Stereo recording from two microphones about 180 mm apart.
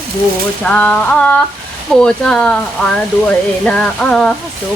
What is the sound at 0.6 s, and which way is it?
Music, 10° left (ahead or behind).